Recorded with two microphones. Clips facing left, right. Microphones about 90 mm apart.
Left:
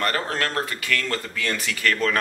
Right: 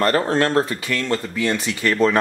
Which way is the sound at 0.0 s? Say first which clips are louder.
Right 7 dB; 30° right (ahead or behind).